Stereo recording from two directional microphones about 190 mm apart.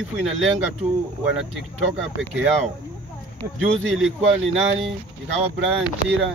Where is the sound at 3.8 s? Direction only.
Centre (ahead or behind).